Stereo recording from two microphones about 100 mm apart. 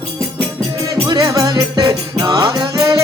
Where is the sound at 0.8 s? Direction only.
35° right (ahead or behind).